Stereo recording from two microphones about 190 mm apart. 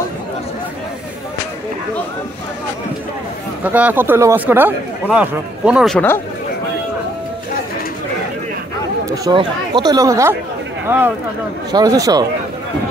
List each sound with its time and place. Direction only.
3.6 s speech: 10° right (ahead or behind)
5.9 s speech: 10° left (ahead or behind)
9.1 s speech: 20° right (ahead or behind)